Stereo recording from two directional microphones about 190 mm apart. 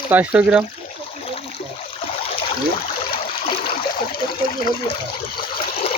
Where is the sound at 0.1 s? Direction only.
10° right (ahead or behind).